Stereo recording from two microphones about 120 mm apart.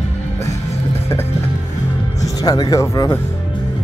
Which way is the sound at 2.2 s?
30° left (ahead or behind).